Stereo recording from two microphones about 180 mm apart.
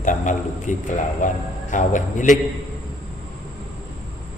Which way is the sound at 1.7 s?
45° left (ahead or behind).